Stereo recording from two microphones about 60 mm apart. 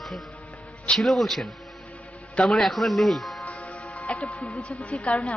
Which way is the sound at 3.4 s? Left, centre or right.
Left.